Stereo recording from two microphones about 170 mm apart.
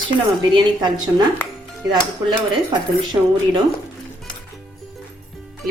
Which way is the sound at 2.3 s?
25° right (ahead or behind).